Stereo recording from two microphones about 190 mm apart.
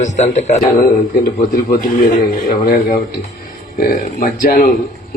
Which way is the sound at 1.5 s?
50° left (ahead or behind).